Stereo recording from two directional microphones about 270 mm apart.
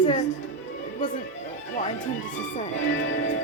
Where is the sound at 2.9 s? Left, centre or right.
Left.